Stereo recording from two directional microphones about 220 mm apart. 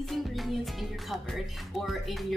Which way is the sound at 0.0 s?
Centre (ahead or behind).